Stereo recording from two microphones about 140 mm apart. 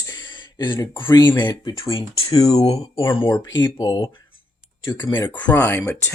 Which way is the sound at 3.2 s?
25° left (ahead or behind).